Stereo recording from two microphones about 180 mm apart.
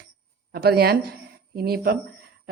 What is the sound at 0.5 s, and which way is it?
A woman's voice, 60° right (ahead or behind).